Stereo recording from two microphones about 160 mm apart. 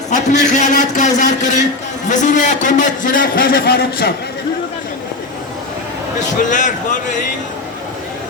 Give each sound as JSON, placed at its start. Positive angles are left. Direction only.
{"t": 0.1, "sound": "a man's voice", "side_deg": 50}
{"t": 6.1, "sound": "a man's voice", "side_deg": 50}